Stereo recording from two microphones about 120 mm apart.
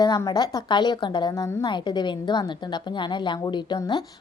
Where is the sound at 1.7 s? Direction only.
40° left (ahead or behind).